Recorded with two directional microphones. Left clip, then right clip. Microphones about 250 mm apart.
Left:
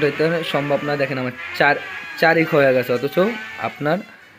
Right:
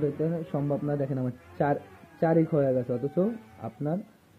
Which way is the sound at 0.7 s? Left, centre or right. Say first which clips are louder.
Left 10 dB; centre.